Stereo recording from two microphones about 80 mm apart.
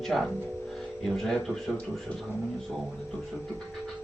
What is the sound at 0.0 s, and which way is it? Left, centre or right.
A man's voice, centre.